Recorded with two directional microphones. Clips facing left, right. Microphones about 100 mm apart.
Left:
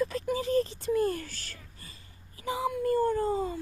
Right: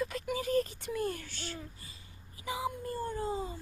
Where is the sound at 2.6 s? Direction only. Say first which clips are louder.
Left 13 dB; 55° left (ahead or behind).